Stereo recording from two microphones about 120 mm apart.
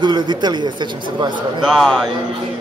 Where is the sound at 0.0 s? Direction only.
35° right (ahead or behind).